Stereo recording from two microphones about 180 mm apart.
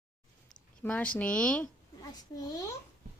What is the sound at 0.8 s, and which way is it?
Speech, 10° left (ahead or behind).